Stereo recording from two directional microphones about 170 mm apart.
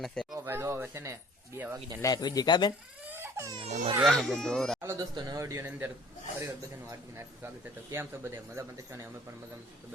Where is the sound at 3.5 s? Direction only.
40° right (ahead or behind).